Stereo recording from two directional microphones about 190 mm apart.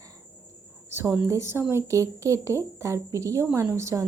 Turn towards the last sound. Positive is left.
turn(degrees=-15)  # may be behind; listen again after turning